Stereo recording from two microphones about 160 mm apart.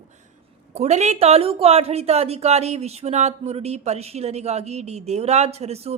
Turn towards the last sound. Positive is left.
turn(degrees=-40)  # may be behind; listen again after turning